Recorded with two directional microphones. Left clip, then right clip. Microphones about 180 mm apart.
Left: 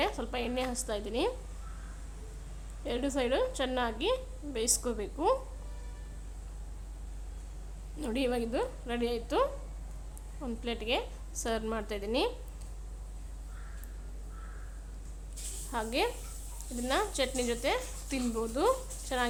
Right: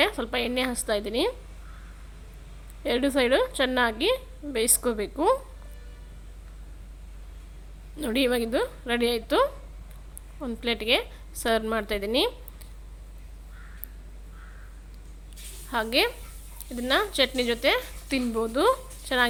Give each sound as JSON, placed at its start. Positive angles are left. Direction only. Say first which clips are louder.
{"t": 0.0, "sound": "a woman's voice", "louder": "right 8 dB", "side_deg": -20}
{"t": 2.8, "sound": "a woman's voice", "louder": "right 9 dB", "side_deg": -20}
{"t": 7.9, "sound": "a woman's voice", "louder": "right 7 dB", "side_deg": -20}
{"t": 15.7, "sound": "a woman's voice", "louder": "right 8 dB", "side_deg": -20}